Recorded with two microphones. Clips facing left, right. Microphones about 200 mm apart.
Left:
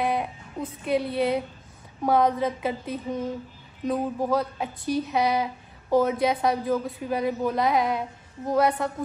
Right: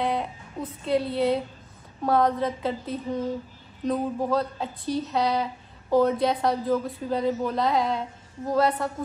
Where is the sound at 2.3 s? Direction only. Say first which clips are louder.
Left 1 dB; centre (ahead or behind).